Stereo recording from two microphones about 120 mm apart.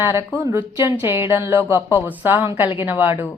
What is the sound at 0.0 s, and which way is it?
A woman's voice, 25° right (ahead or behind).